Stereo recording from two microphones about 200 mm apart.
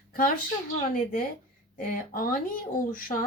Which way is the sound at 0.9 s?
45° left (ahead or behind).